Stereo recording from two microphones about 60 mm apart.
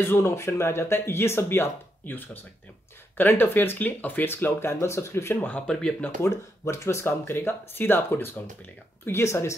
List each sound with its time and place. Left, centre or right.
0.0 s speech: left
5.7 s speech: centre
6.2 s speech: left
9.0 s speech: left